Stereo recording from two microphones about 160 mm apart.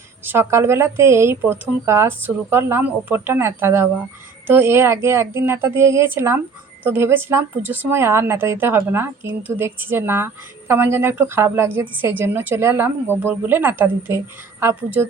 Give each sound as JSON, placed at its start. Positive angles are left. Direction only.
{"t": 0.3, "sound": "speech", "side_deg": -15}